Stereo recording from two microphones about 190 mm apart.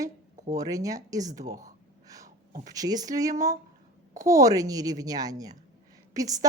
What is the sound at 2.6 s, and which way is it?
A woman's voice, 20° right (ahead or behind).